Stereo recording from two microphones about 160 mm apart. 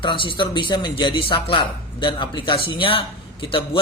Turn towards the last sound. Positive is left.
turn(degrees=35)  # may be behind; listen again after turning